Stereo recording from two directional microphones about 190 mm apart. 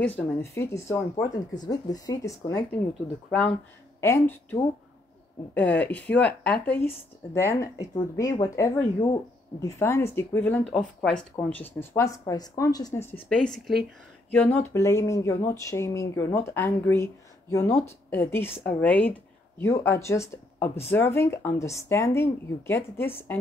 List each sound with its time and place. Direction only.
0.0 s speech: 10° left (ahead or behind)
3.3 s speech: 5° left (ahead or behind)